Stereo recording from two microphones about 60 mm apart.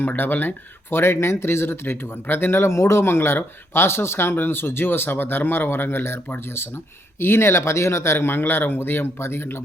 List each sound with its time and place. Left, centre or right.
0.0 s speech: left
7.2 s speech: left